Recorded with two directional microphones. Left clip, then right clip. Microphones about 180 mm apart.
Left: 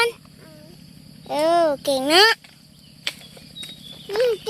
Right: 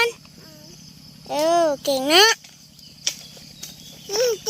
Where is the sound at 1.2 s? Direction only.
Centre (ahead or behind).